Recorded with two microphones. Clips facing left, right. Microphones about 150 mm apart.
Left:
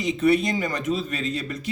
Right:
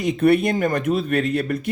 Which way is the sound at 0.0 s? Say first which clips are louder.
Right 3 dB; 55° right (ahead or behind).